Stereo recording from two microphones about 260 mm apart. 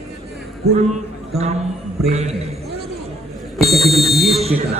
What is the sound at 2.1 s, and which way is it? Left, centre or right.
Speech, right.